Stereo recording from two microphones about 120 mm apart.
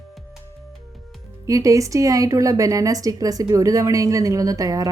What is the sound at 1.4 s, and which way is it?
A woman's voice, 25° right (ahead or behind).